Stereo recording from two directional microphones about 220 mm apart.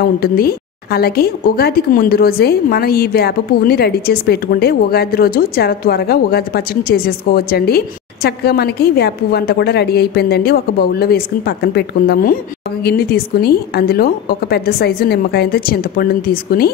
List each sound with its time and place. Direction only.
0.0 s a woman's voice: 45° left (ahead or behind)